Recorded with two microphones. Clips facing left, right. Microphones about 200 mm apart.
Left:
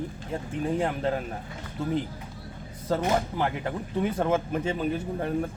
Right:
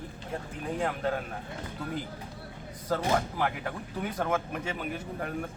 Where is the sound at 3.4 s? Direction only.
25° left (ahead or behind).